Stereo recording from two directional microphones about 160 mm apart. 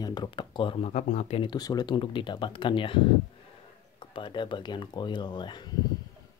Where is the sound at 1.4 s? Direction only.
25° left (ahead or behind).